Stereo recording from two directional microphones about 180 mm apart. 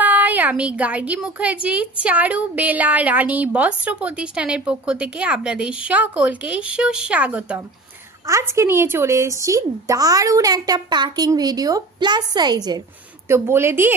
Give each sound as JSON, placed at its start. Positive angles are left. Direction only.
{"t": 0.0, "sound": "a woman's voice", "side_deg": -10}